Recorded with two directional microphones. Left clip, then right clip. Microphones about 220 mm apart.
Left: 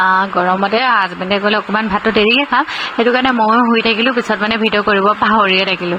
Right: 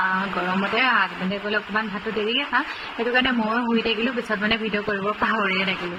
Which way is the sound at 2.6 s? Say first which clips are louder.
Left 10 dB; 35° left (ahead or behind).